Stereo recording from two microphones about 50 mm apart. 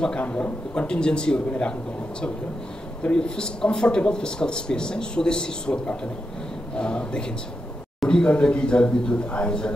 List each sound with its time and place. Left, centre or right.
0.2 s speech: left
3.0 s speech: centre